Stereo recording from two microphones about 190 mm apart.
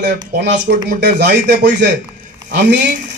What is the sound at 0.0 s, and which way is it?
Speech, 65° right (ahead or behind).